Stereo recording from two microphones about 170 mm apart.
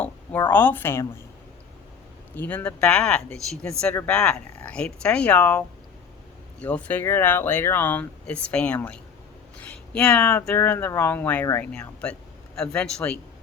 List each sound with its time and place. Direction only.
0.0 s a sound: 10° left (ahead or behind)
0.5 s speech: 10° left (ahead or behind)
2.3 s speech: 10° left (ahead or behind)